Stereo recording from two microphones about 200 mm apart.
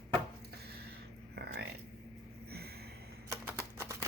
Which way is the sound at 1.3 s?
55° right (ahead or behind).